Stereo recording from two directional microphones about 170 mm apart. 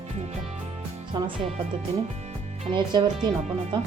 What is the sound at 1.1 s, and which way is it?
Music, 25° right (ahead or behind).